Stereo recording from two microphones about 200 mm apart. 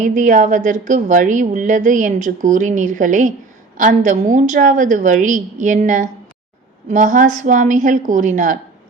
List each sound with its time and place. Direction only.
0.0 s a woman's voice: 40° right (ahead or behind)